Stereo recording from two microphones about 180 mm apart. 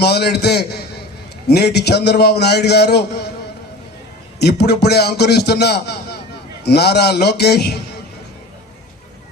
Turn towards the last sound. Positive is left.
turn(degrees=65)  # may be behind; listen again after turning